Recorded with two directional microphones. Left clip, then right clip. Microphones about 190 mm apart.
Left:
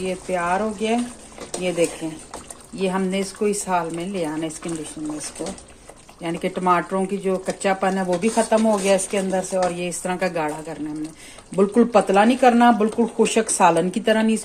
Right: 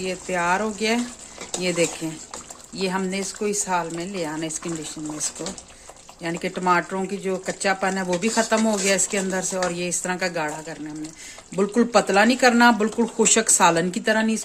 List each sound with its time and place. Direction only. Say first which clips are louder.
0.0 s speech: left 1 dB; 15° right (ahead or behind)
6.2 s speech: left 2 dB; 10° right (ahead or behind)
8.1 s speech: left 2 dB; 20° right (ahead or behind)